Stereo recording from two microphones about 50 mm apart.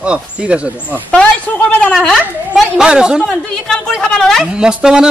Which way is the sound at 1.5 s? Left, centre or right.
Left.